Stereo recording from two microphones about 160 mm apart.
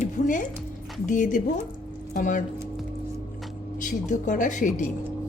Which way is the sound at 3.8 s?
55° left (ahead or behind).